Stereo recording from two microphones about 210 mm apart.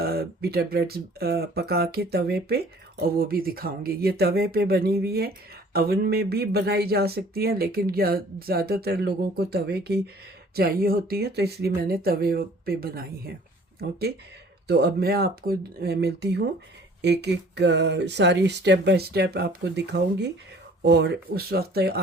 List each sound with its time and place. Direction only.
0.0 s speech: 45° right (ahead or behind)
14.7 s speech: 50° right (ahead or behind)